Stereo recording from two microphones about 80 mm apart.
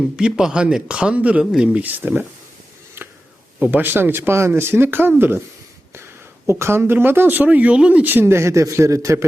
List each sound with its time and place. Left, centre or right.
0.2 s speech: centre
3.6 s speech: right
6.5 s speech: right